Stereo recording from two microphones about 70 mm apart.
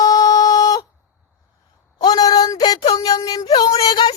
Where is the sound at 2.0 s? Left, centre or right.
Left.